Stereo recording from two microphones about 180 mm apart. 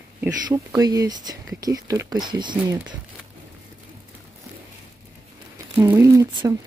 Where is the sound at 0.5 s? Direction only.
20° right (ahead or behind).